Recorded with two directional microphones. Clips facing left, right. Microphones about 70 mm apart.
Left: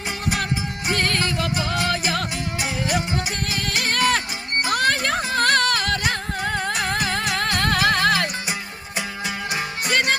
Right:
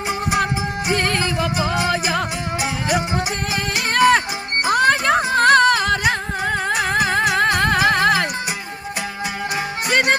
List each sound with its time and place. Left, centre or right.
0.9 s music: centre